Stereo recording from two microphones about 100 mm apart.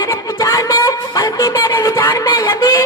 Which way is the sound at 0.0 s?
35° left (ahead or behind).